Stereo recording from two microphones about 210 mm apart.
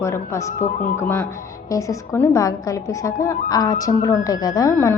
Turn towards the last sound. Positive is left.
turn(degrees=15)  # may be behind; listen again after turning